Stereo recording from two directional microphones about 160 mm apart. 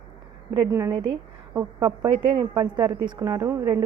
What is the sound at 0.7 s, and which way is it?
Speech, 20° right (ahead or behind).